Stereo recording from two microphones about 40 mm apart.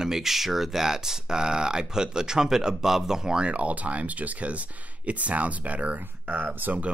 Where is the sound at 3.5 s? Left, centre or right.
Right.